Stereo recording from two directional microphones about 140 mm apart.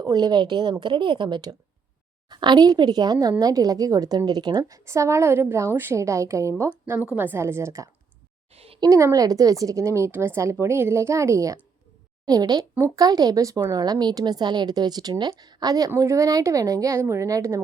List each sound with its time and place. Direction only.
0.0 s a woman's voice: 30° right (ahead or behind)
8.5 s a sound: 45° right (ahead or behind)
8.8 s a woman's voice: 20° right (ahead or behind)